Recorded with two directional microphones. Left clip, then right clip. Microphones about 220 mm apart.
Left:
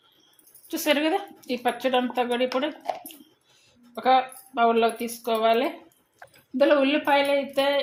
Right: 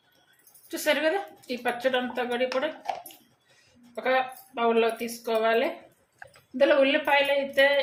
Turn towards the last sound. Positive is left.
turn(degrees=25)  # may be behind; listen again after turning